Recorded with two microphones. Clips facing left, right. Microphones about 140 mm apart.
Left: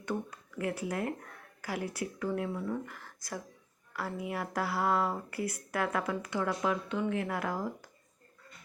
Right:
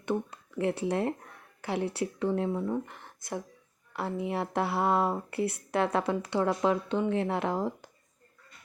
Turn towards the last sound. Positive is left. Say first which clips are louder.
# right 5 dB
turn(degrees=-25)  # may be behind; listen again after turning